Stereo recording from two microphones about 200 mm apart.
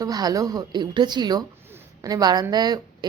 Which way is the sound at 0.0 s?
20° right (ahead or behind).